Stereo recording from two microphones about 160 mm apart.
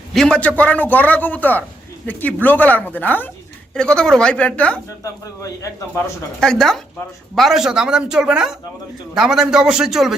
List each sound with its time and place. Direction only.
0.1 s a man's voice: 5° left (ahead or behind)
5.2 s a man's voice: 20° left (ahead or behind)
6.4 s speech: 5° left (ahead or behind)